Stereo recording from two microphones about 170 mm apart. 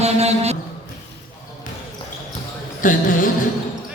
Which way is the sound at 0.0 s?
40° right (ahead or behind).